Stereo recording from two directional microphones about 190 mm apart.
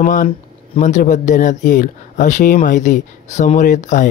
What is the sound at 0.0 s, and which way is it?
Speech, 45° left (ahead or behind).